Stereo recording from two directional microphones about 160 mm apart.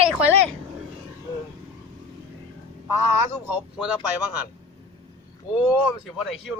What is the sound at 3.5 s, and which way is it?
Speech, 5° right (ahead or behind).